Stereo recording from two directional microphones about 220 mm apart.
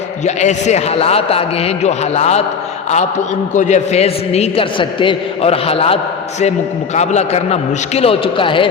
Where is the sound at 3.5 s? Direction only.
35° left (ahead or behind).